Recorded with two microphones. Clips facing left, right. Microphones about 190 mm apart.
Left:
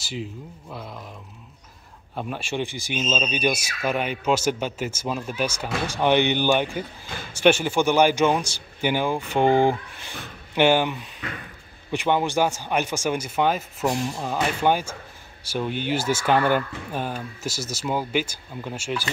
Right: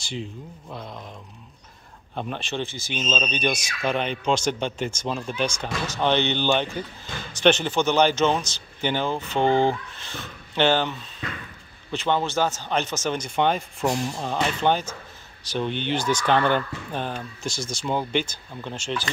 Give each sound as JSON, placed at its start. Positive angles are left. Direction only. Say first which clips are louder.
{"t": 0.0, "sound": "speech", "louder": "left 1 dB", "side_deg": 5}
{"t": 2.1, "sound": "speech", "louder": "left 1 dB", "side_deg": 5}